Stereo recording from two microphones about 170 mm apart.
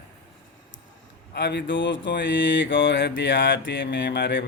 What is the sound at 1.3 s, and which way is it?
Mantra, 80° left.